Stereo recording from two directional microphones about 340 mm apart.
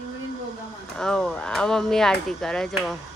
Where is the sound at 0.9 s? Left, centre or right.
Centre.